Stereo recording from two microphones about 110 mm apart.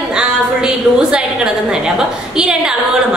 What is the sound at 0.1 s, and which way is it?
A woman's voice, 5° right (ahead or behind).